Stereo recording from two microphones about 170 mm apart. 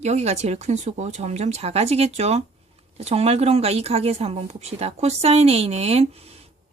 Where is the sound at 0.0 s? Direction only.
40° right (ahead or behind).